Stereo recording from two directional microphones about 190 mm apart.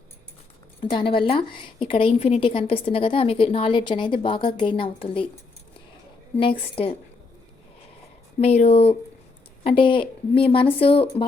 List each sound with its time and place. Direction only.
0.8 s a woman's voice: 25° left (ahead or behind)
6.3 s a woman's voice: 30° left (ahead or behind)
8.4 s a woman's voice: 35° left (ahead or behind)